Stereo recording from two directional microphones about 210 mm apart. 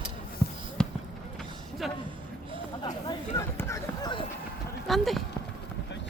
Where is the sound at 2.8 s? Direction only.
15° left (ahead or behind).